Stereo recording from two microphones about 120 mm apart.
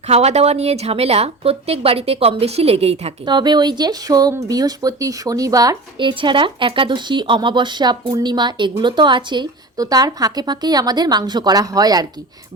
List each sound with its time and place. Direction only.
0.1 s speech: 65° right (ahead or behind)
3.2 s a woman's voice: 35° right (ahead or behind)
6.0 s a woman's voice: 45° right (ahead or behind)